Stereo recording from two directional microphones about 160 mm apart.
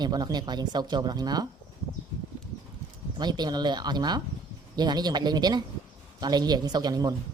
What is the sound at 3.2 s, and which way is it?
Speech, 25° right (ahead or behind).